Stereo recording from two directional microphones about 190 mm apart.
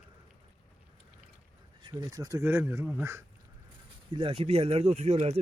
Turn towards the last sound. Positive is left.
turn(degrees=-35)  # may be behind; listen again after turning